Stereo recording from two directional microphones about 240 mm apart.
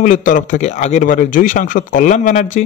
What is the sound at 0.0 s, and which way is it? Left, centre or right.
Speech, left.